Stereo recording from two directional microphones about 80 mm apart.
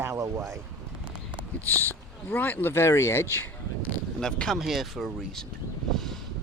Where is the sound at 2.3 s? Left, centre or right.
Left.